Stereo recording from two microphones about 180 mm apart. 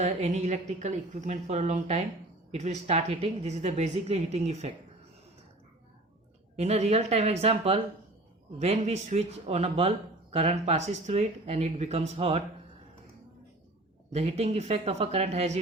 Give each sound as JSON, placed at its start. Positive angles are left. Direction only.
{"t": 0.0, "sound": "a woman's voice", "side_deg": -40}
{"t": 6.6, "sound": "a woman's voice", "side_deg": -35}
{"t": 14.1, "sound": "a woman's voice", "side_deg": -35}